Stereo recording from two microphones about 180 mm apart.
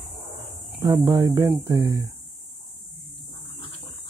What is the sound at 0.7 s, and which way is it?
Speech, 20° right (ahead or behind).